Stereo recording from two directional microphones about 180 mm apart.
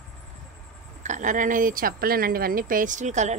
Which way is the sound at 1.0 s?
45° right (ahead or behind).